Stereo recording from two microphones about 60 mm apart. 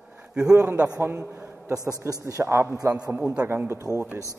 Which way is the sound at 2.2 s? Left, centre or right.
Right.